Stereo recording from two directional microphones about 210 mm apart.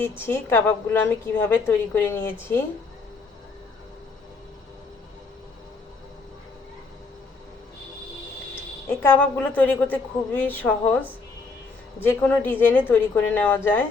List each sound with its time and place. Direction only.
0.0 s a woman's voice: 10° left (ahead or behind)
9.0 s a woman's voice: 10° left (ahead or behind)
12.0 s a woman's voice: 10° left (ahead or behind)